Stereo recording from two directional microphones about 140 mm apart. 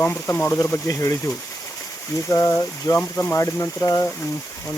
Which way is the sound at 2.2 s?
20° left (ahead or behind).